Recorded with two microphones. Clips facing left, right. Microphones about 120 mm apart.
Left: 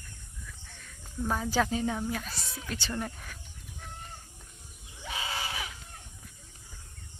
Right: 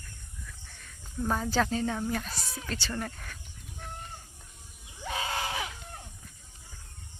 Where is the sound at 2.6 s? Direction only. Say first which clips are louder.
Even; 15° left (ahead or behind).